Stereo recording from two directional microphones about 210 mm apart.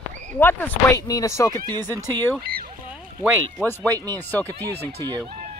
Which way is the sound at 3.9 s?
15° right (ahead or behind).